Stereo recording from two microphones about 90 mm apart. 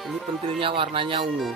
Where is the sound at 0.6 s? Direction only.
70° right (ahead or behind).